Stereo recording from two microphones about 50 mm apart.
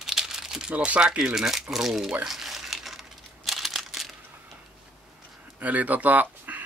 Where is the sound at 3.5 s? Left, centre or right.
Centre.